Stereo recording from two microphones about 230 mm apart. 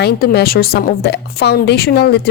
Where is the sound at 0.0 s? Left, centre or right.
Left.